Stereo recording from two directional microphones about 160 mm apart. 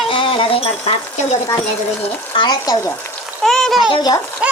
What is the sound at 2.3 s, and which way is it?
Speech, 25° left (ahead or behind).